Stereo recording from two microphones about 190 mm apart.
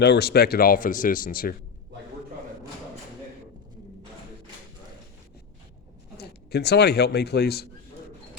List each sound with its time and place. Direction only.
0.0 s speech: 60° left (ahead or behind)
6.1 s a man's voice: 60° left (ahead or behind)